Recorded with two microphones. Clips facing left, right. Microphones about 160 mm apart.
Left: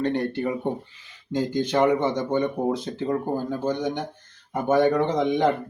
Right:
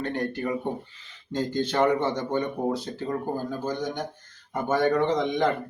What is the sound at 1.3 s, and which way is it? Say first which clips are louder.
Speech: left 3 dB; 15° left (ahead or behind).